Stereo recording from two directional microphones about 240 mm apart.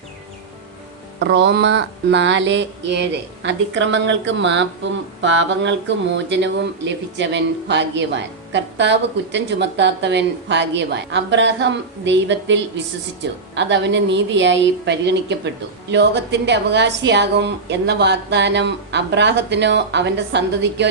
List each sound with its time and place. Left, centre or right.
1.2 s a woman's voice: right